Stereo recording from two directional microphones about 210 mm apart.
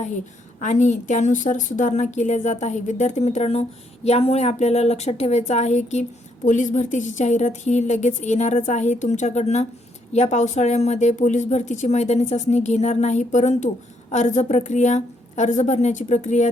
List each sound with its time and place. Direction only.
0.6 s a woman's voice: 35° left (ahead or behind)